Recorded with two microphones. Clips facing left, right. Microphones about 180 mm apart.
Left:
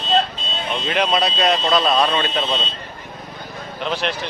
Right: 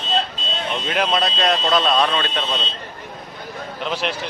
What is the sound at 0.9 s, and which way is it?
Speech, centre (ahead or behind).